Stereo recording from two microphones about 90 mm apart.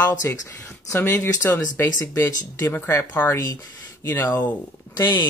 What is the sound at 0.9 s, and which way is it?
Speech, 20° left (ahead or behind).